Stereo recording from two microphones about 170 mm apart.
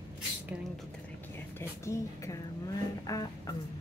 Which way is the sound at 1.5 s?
15° left (ahead or behind).